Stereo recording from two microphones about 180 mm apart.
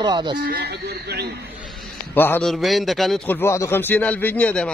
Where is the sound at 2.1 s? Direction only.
10° left (ahead or behind).